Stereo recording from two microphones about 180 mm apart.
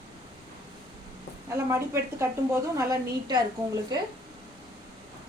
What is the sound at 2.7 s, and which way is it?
Speech, 20° right (ahead or behind).